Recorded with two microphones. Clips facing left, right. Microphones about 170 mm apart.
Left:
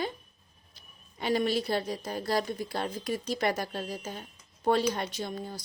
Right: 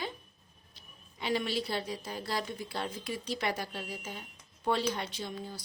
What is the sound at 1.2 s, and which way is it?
A woman's voice, 45° left (ahead or behind).